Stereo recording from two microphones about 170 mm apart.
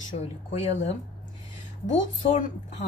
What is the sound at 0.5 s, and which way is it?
Speech, 40° left (ahead or behind).